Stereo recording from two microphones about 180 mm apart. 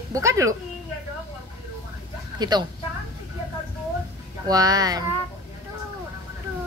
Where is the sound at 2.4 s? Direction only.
25° right (ahead or behind).